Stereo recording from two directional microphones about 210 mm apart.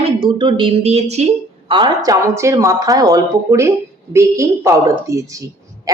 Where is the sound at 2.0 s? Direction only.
15° right (ahead or behind).